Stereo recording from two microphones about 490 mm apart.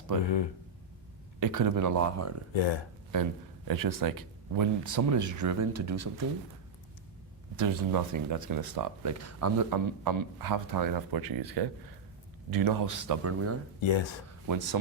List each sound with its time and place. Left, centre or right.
1.4 s speech: right
2.5 s speech: left
3.7 s speech: right
7.5 s speech: right
13.8 s speech: left
14.4 s speech: right